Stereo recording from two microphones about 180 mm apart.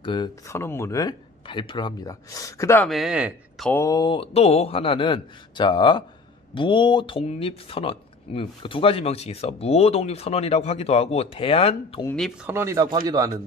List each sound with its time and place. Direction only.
0.0 s speech: 25° left (ahead or behind)
0.5 s speech: 15° left (ahead or behind)
2.9 s speech: 5° right (ahead or behind)
3.7 s speech: 20° left (ahead or behind)
12.4 s speech: 15° right (ahead or behind)